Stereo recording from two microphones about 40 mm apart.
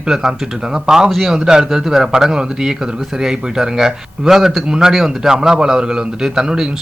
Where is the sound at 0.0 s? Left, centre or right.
Centre.